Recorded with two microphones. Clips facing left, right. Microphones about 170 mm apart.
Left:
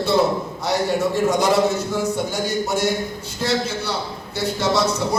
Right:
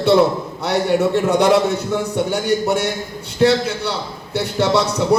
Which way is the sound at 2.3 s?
60° right (ahead or behind).